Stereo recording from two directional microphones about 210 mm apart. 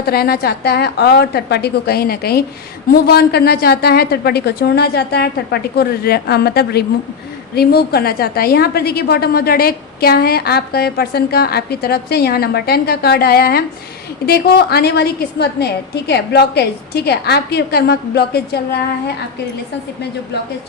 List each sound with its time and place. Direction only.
0.0 s a woman's voice: 45° left (ahead or behind)